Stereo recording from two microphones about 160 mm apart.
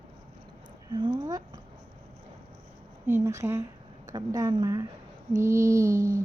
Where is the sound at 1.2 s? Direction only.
20° right (ahead or behind).